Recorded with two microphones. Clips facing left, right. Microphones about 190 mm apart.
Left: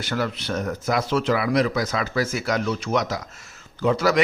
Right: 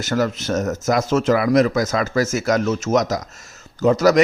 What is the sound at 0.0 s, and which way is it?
A man's voice, 45° right (ahead or behind).